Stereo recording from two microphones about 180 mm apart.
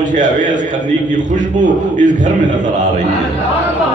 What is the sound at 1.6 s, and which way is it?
A man's voice, 45° right (ahead or behind).